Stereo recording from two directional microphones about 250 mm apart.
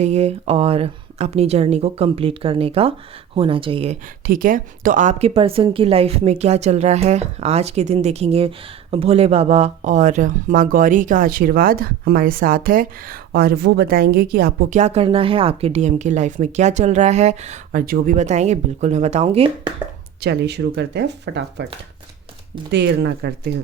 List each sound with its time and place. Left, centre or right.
0.0 s a woman's voice: right
4.3 s a woman's voice: right
20.2 s speech: right
22.7 s speech: right